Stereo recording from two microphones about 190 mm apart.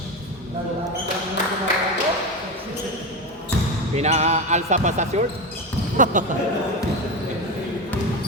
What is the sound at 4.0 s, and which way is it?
Speech, 35° right (ahead or behind).